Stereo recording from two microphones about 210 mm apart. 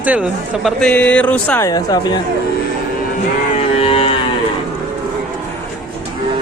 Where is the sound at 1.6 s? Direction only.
15° left (ahead or behind).